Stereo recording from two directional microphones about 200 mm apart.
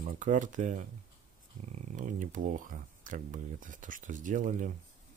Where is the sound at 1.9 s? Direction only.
40° right (ahead or behind).